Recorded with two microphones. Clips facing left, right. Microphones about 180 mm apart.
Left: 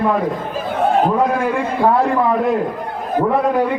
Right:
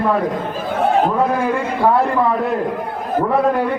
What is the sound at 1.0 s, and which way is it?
Speech, centre (ahead or behind).